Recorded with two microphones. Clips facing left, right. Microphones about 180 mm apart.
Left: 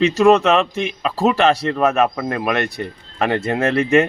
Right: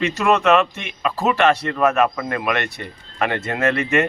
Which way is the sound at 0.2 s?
30° left (ahead or behind).